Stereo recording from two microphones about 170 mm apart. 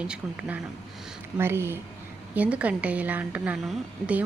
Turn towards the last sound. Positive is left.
turn(degrees=-5)  # may be behind; listen again after turning